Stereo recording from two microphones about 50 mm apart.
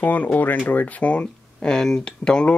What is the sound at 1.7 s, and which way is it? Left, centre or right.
Speech, centre.